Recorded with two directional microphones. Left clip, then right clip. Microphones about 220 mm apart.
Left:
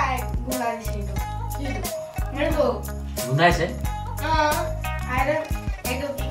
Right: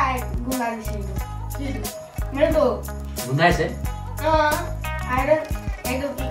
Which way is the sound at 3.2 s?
Centre (ahead or behind).